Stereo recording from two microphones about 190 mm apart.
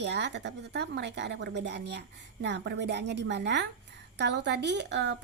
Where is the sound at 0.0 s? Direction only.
65° right (ahead or behind).